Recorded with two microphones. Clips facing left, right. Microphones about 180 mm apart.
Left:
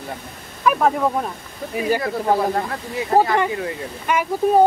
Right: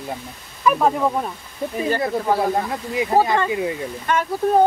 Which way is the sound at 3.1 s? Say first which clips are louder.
Left 1 dB; 20° right (ahead or behind).